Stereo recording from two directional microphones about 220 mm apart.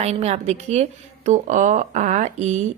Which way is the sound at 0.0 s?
30° right (ahead or behind).